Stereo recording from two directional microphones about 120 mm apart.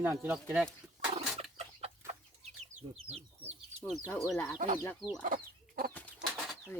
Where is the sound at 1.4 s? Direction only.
60° right (ahead or behind).